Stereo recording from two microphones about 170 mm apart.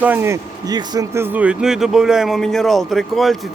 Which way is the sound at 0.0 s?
10° right (ahead or behind).